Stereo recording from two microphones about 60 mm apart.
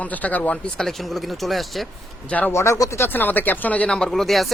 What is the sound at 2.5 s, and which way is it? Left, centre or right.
Speech, left.